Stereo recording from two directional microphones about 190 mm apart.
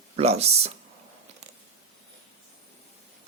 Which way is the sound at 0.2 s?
35° right (ahead or behind).